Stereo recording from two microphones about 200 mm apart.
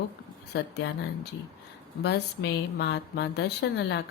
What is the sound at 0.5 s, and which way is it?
Speech, 60° left (ahead or behind).